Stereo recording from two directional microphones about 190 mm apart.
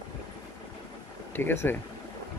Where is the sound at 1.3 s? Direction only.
10° left (ahead or behind).